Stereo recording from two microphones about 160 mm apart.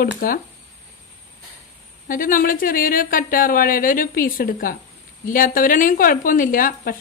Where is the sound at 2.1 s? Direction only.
60° left (ahead or behind).